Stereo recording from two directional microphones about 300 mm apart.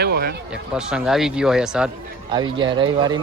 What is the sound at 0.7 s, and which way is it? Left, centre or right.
Speech, centre.